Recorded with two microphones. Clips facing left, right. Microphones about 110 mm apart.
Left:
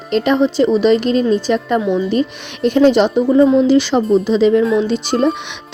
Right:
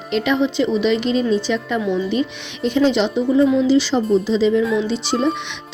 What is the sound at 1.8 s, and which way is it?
Speech, 30° left (ahead or behind).